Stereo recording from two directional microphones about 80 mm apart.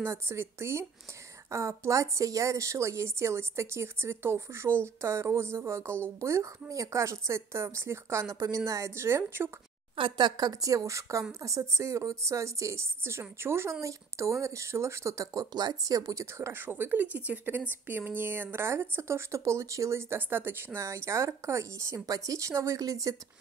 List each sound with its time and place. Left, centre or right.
0.0 s a woman's voice: right
9.9 s a woman's voice: right